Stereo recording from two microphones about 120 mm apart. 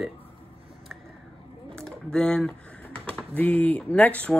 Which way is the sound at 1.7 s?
5° left (ahead or behind).